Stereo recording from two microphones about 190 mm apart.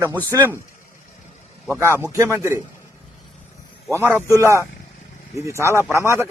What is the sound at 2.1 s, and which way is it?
Speech, 15° right (ahead or behind).